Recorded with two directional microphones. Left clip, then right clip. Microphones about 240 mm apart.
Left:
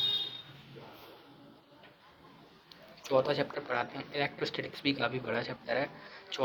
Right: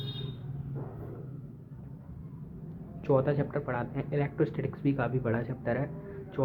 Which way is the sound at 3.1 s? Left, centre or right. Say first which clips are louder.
Right 1 dB; left.